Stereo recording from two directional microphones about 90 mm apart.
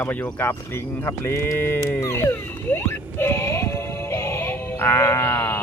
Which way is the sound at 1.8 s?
35° left (ahead or behind).